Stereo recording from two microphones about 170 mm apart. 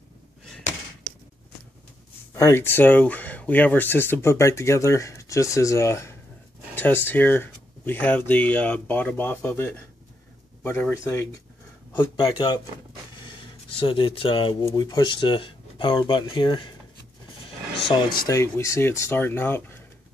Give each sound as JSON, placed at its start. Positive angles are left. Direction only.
{"t": 2.3, "sound": "speech", "side_deg": 15}
{"t": 11.9, "sound": "speech", "side_deg": 25}
{"t": 13.2, "sound": "a sound", "side_deg": 30}
{"t": 14.6, "sound": "speech", "side_deg": 20}
{"t": 17.8, "sound": "speech", "side_deg": 25}